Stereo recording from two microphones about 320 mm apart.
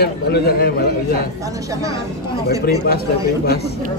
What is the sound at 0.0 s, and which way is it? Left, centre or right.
A man's voice, left.